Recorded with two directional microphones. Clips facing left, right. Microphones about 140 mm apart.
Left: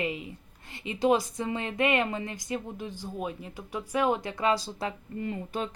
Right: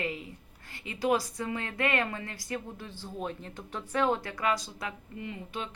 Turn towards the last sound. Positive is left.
turn(degrees=40)  # may be behind; listen again after turning